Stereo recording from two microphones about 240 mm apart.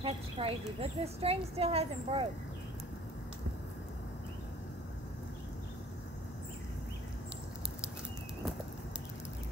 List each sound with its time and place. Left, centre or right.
0.0 s speech: right